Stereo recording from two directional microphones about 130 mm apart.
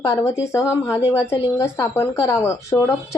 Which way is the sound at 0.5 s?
20° left (ahead or behind).